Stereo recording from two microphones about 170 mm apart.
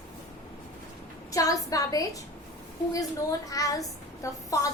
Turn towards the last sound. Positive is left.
turn(degrees=20)  # may be behind; listen again after turning